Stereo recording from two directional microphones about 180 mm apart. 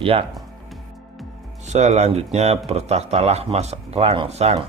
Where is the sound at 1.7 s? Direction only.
40° right (ahead or behind).